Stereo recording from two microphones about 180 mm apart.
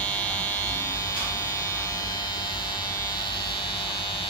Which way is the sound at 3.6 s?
25° left (ahead or behind).